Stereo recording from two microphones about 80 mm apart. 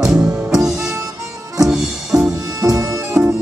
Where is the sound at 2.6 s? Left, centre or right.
Right.